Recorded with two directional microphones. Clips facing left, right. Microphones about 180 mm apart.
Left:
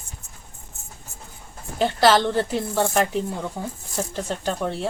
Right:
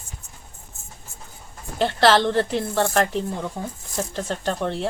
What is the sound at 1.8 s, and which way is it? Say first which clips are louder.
Speech: even; 5° left (ahead or behind).